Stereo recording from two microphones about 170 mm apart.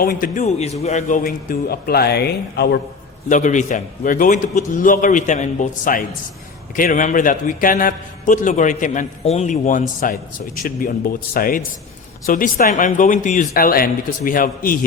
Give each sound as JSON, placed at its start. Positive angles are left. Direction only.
{"t": 0.0, "sound": "a man's voice", "side_deg": 55}
{"t": 3.2, "sound": "a man's voice", "side_deg": 45}